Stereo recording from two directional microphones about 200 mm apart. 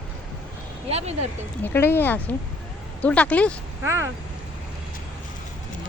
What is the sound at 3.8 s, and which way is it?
Speech, 15° right (ahead or behind).